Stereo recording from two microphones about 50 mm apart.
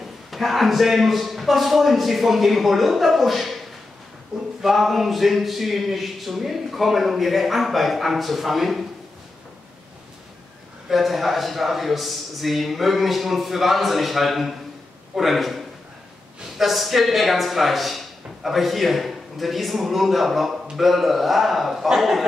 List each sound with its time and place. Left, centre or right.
0.3 s speech: centre
4.6 s speech: centre
10.9 s speech: centre